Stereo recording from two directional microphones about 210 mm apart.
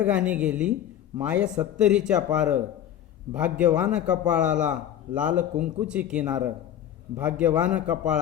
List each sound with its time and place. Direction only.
0.0 s a man's voice: 5° right (ahead or behind)